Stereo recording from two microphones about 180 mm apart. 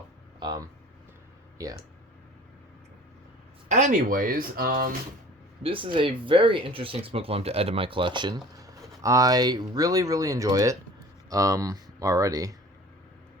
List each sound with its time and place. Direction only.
0.3 s speech: 25° right (ahead or behind)
3.7 s speech: 40° right (ahead or behind)
5.6 s speech: 30° right (ahead or behind)